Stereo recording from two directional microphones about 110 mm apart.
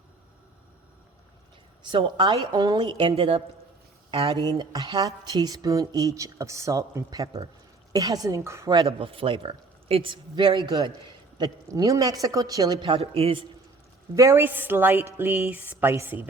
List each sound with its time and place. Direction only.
1.8 s a man's voice: 45° right (ahead or behind); by 8.7 s 25° right (ahead or behind)
8.9 s a man's voice: 55° right (ahead or behind); by 12.8 s 35° right (ahead or behind)
13.0 s a man's voice: 65° right (ahead or behind)
14.2 s a woman's voice: 25° right (ahead or behind)